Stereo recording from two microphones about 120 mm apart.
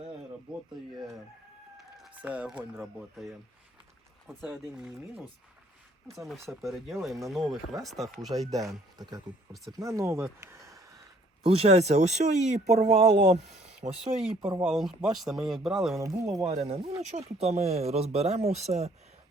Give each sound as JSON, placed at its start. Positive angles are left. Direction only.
{"t": 2.1, "sound": "speech", "side_deg": -10}
{"t": 2.8, "sound": "speech", "side_deg": 0}
{"t": 4.5, "sound": "speech", "side_deg": -5}
{"t": 8.4, "sound": "speech", "side_deg": -30}
{"t": 10.4, "sound": "a sound", "side_deg": -25}
{"t": 11.4, "sound": "speech", "side_deg": -55}
{"t": 13.4, "sound": "a sound", "side_deg": -5}
{"t": 14.7, "sound": "speech", "side_deg": 0}
{"t": 16.0, "sound": "speech", "side_deg": -25}
{"t": 16.5, "sound": "speech", "side_deg": -65}